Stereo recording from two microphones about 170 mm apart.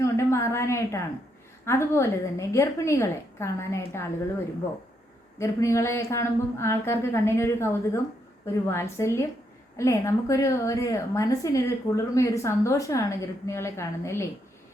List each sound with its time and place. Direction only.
0.0 s a woman's voice: 15° left (ahead or behind)
5.4 s a woman's voice: 15° left (ahead or behind)